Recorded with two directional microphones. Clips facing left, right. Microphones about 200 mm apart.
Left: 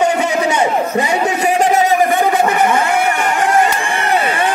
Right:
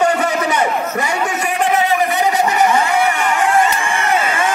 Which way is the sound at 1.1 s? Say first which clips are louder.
Left 5 dB; 35° left (ahead or behind).